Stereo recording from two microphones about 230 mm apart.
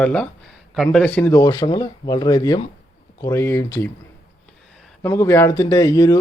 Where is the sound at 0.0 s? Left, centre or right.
Centre.